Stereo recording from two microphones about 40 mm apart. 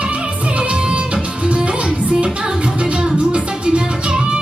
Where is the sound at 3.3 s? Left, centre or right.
Right.